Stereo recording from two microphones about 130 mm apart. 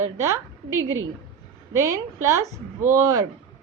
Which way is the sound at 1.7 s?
25° right (ahead or behind).